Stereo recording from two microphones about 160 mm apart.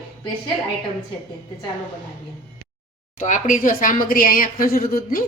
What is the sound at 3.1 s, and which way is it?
Speech, 50° left (ahead or behind).